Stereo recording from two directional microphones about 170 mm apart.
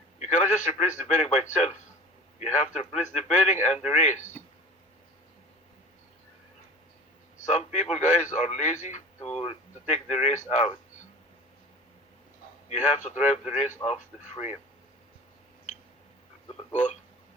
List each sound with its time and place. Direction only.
0.2 s speech: 45° left (ahead or behind)
7.4 s speech: 45° left (ahead or behind)
12.6 s speech: 45° left (ahead or behind)
16.5 s speech: 40° left (ahead or behind)